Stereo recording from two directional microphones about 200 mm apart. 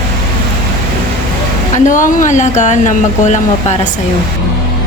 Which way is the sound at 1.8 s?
40° left (ahead or behind).